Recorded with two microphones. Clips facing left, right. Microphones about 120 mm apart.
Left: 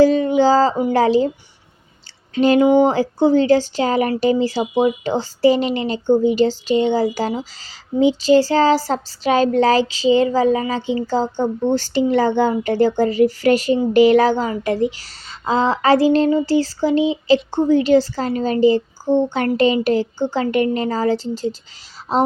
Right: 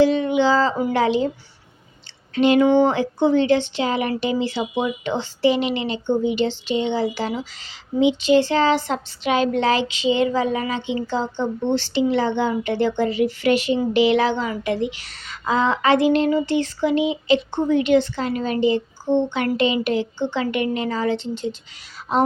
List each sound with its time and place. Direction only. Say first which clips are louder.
0.0 s a sound: left 4 dB; 40° left (ahead or behind)
0.9 s speech: left 5 dB; 35° left (ahead or behind)
2.3 s speech: left 2 dB; 35° left (ahead or behind)